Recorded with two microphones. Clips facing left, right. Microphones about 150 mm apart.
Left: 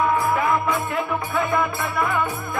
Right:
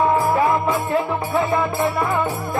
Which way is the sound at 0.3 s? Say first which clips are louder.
Right 3 dB; 30° right (ahead or behind).